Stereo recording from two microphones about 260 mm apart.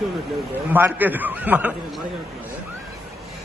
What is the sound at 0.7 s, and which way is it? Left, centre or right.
A man's voice, centre.